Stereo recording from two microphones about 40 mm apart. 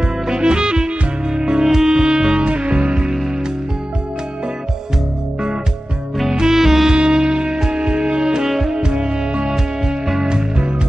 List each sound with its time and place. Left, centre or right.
0.3 s music: right
6.3 s music: centre
8.7 s music: right